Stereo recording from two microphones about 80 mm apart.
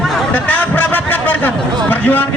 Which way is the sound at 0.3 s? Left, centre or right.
Centre.